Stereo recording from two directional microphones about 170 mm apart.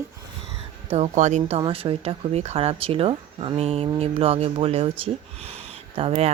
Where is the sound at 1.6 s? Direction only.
30° right (ahead or behind).